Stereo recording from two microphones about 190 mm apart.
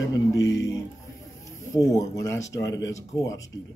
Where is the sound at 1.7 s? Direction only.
20° left (ahead or behind).